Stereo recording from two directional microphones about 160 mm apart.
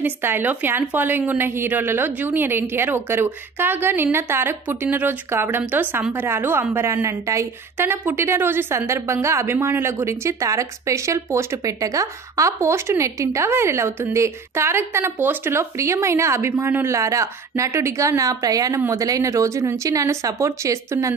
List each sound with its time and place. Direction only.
0.0 s speech: 15° right (ahead or behind)